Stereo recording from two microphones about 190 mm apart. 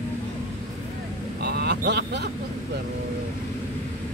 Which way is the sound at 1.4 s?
60° right (ahead or behind).